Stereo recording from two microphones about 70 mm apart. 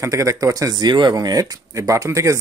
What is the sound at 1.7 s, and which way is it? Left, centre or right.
Speech, right.